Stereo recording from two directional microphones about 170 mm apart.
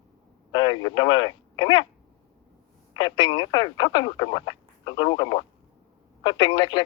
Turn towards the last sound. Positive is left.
turn(degrees=25)  # may be behind; listen again after turning